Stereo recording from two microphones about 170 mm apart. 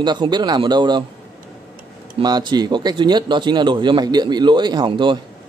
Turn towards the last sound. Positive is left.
turn(degrees=-30)  # may be behind; listen again after turning